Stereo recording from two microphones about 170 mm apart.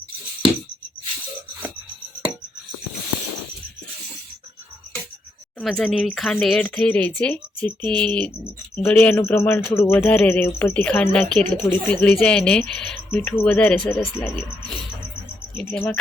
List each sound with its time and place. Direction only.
5.5 s speech: centre (ahead or behind)
15.7 s speech: 10° left (ahead or behind)